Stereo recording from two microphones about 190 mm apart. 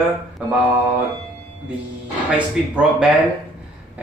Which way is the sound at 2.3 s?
5° right (ahead or behind).